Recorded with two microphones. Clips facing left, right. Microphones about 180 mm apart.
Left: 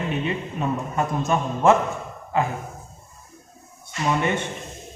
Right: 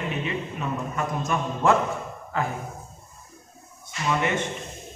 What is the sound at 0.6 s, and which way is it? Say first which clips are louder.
A man's voice: left 4 dB; 30° left (ahead or behind).